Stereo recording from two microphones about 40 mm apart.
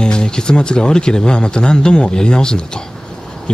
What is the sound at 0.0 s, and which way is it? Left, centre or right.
Speech, left.